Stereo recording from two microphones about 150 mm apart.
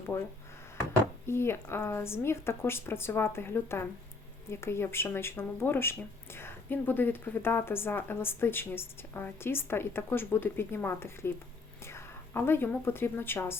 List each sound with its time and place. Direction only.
1.3 s a woman's voice: 15° left (ahead or behind)